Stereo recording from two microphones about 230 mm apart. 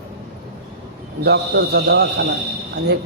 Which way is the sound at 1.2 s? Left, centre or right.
Right.